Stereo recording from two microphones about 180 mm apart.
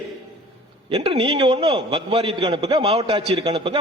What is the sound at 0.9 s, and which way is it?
A man's voice, 35° right (ahead or behind).